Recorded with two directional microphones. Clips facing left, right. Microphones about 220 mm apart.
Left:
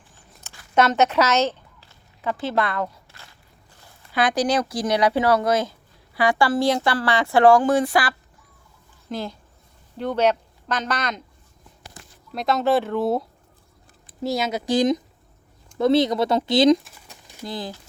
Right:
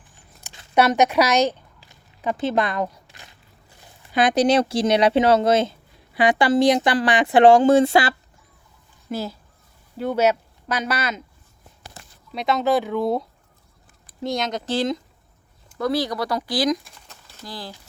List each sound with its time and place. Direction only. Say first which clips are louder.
0.4 s a sound: right 1 dB; 20° right (ahead or behind)
0.8 s speech: right 1 dB; 15° right (ahead or behind)
9.0 s speech: right 2 dB; 5° right (ahead or behind)
12.3 s speech: even; centre (ahead or behind); by 16.7 s 25° left (ahead or behind)
16.8 s crumpling: left 1 dB; 5° left (ahead or behind)
17.2 s speech: left 5 dB; 20° left (ahead or behind)